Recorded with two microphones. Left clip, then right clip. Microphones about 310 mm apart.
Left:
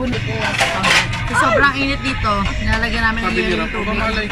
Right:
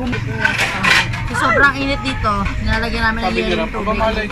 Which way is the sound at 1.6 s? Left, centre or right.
Centre.